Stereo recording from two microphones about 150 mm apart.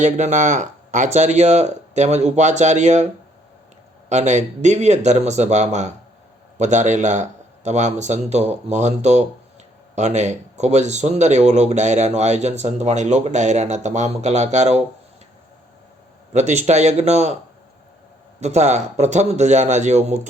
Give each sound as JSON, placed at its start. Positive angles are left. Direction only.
{"t": 0.0, "sound": "speech", "side_deg": -55}
{"t": 4.1, "sound": "speech", "side_deg": -50}
{"t": 16.3, "sound": "speech", "side_deg": -50}
{"t": 18.3, "sound": "speech", "side_deg": -50}